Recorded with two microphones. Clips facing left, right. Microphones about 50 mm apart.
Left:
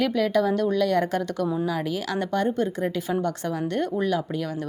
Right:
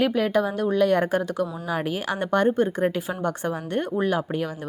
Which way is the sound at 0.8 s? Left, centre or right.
Right.